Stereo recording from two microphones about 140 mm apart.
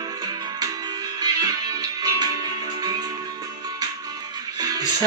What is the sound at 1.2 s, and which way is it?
Music, 25° right (ahead or behind).